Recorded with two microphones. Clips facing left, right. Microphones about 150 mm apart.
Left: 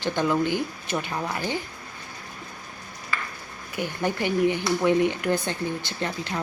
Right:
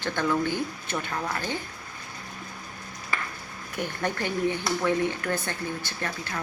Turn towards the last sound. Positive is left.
turn(degrees=20)  # may be behind; listen again after turning